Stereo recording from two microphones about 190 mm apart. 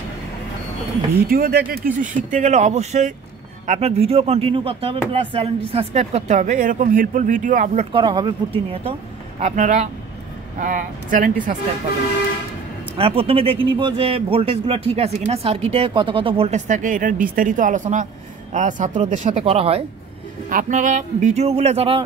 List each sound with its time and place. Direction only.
1.2 s speech: 55° right (ahead or behind)
2.0 s speech: 40° right (ahead or behind)
9.4 s speech: 40° right (ahead or behind)
12.9 s speech: 30° right (ahead or behind)
20.4 s speech: 45° right (ahead or behind)